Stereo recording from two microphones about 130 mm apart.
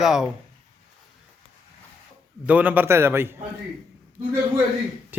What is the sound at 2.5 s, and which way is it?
Speech, 10° right (ahead or behind).